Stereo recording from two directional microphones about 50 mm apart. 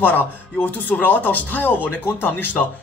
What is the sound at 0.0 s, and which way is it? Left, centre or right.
Speech, left.